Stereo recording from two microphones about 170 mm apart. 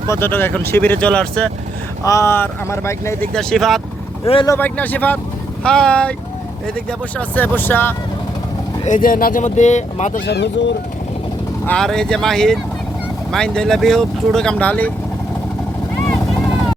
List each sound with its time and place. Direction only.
0.1 s speech: 10° left (ahead or behind)
2.0 s speech: 15° left (ahead or behind)
3.3 s speech: centre (ahead or behind)
7.2 s speech: 10° left (ahead or behind)
8.8 s speech: 50° left (ahead or behind)
10.2 s speech: 85° left
11.6 s speech: 5° left (ahead or behind)